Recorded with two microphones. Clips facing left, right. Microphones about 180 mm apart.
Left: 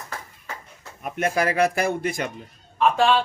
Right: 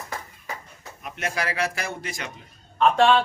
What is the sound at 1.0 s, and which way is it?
Speech, 50° left (ahead or behind).